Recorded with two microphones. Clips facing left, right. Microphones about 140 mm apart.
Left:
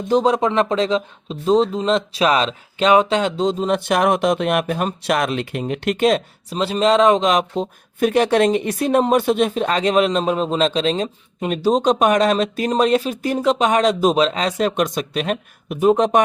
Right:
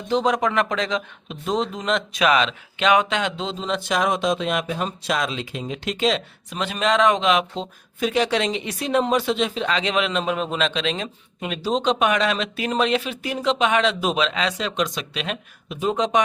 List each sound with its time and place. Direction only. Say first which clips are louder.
0.1 s speech: left 4 dB; 35° left (ahead or behind); by 6.2 s 50° left (ahead or behind)
6.5 s speech: left 6 dB; 35° left (ahead or behind); by 16.2 s 55° left (ahead or behind)